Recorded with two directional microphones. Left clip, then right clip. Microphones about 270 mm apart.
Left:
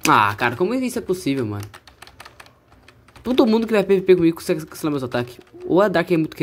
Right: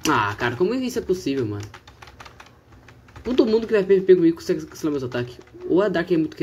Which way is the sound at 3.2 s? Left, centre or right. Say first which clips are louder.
Left 2 dB; left.